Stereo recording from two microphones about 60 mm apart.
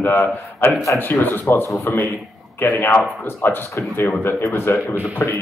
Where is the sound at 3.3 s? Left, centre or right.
Left.